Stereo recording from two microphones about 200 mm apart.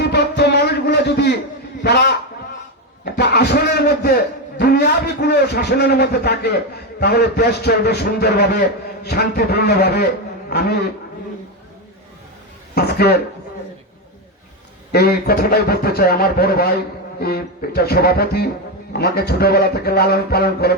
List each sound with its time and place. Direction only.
0.0 s music: 55° left (ahead or behind)
1.8 s a man's voice: 55° left (ahead or behind)
3.0 s a sound: 55° left (ahead or behind)
7.0 s speech: 55° left (ahead or behind)
12.7 s speech: 50° left (ahead or behind)
14.9 s speech: 50° left (ahead or behind)